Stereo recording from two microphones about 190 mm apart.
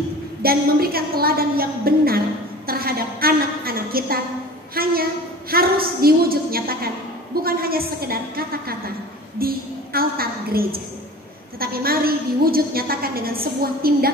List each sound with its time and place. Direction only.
0.4 s a woman's voice: 50° right (ahead or behind)